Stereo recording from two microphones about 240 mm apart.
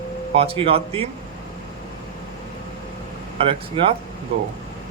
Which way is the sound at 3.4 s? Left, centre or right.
Right.